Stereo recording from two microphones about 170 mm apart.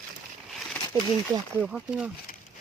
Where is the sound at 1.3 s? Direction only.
10° right (ahead or behind).